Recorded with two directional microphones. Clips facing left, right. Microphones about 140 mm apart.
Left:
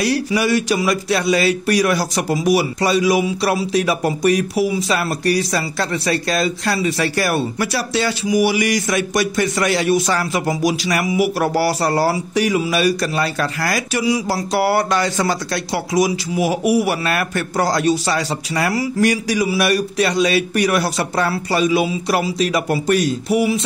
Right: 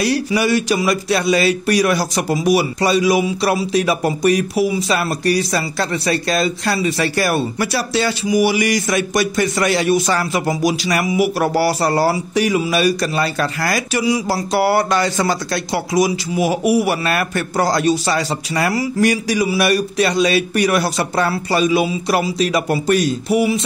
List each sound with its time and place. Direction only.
0.0 s speech: 25° right (ahead or behind)